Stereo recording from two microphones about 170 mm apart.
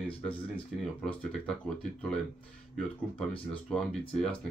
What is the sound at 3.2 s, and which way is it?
Speech, 5° left (ahead or behind).